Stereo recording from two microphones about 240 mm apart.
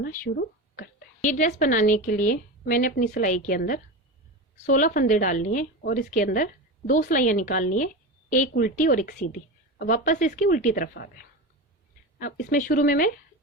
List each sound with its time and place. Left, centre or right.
0.0 s a woman's voice: left
12.2 s a woman's voice: left